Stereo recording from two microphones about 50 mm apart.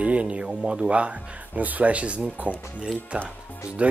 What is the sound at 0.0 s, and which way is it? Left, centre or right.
Speech, right.